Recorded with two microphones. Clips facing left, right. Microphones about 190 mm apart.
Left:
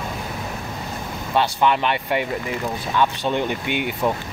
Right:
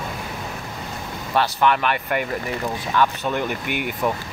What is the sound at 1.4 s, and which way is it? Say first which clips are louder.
Speech: even; 20° left (ahead or behind).